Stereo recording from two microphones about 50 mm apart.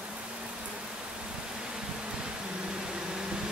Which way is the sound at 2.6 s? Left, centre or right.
Centre.